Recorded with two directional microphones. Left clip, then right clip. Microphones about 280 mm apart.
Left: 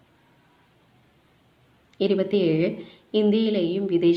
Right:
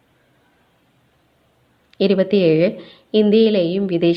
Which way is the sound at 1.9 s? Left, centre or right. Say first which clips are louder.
Right 6 dB; right.